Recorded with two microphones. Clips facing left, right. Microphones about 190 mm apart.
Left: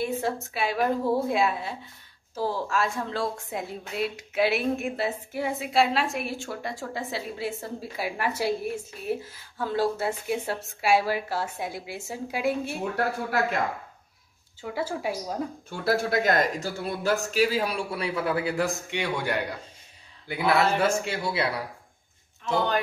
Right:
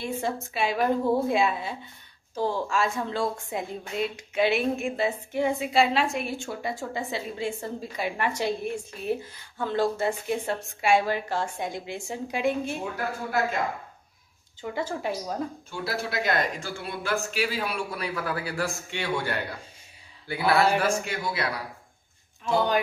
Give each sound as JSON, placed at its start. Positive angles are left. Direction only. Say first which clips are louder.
{"t": 0.0, "sound": "a woman's voice", "louder": "left 2 dB", "side_deg": 0}
{"t": 14.6, "sound": "a woman's voice", "louder": "even", "side_deg": 10}
{"t": 15.7, "sound": "a man's voice", "louder": "left 8 dB", "side_deg": 55}
{"t": 17.9, "sound": "a man's voice", "louder": "left 4 dB", "side_deg": 25}